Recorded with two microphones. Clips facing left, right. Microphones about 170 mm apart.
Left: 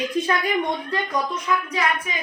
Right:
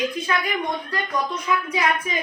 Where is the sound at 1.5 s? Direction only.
5° right (ahead or behind).